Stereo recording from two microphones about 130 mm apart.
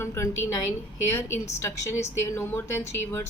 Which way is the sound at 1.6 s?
20° left (ahead or behind).